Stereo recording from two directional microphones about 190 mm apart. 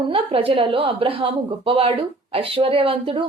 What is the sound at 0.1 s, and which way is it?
A woman's voice, 30° right (ahead or behind).